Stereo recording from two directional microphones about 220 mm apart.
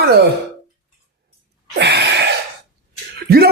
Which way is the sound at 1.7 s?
50° right (ahead or behind).